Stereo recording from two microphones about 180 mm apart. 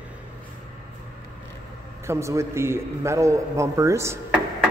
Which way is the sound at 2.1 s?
15° right (ahead or behind).